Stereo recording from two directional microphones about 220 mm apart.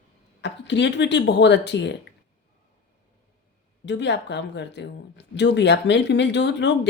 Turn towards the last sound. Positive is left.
turn(degrees=50)  # may be behind; listen again after turning